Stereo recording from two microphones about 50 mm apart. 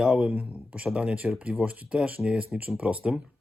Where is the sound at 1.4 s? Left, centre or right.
Right.